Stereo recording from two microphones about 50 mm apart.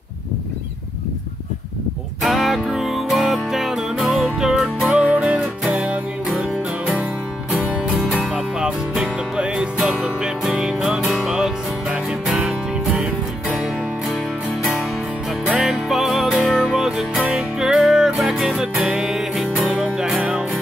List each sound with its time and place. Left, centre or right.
2.2 s music: centre
4.9 s music: right
8.2 s music: centre
11.1 s music: centre
11.3 s music: centre
15.5 s music: centre